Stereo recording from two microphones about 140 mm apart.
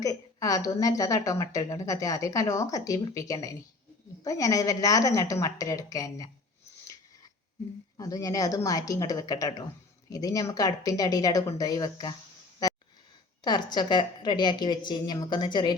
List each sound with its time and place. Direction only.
0.0 s a woman's voice: 25° left (ahead or behind)
7.9 s a woman's voice: 25° left (ahead or behind)
12.6 s a sound: 25° left (ahead or behind)
13.4 s a woman's voice: 30° left (ahead or behind)